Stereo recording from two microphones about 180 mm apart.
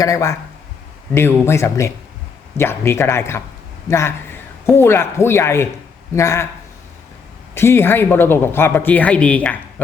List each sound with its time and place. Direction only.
0.0 s a man's voice: 15° left (ahead or behind)
7.5 s speech: 15° left (ahead or behind)